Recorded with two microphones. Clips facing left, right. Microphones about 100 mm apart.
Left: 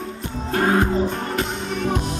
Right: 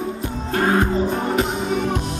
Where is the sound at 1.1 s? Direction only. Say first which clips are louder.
Right 4 dB; 5° right (ahead or behind).